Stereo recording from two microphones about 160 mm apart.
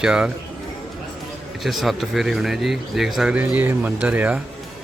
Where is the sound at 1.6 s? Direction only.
Centre (ahead or behind).